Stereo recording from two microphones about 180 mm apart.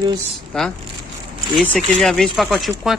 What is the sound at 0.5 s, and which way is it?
Speech, 5° left (ahead or behind).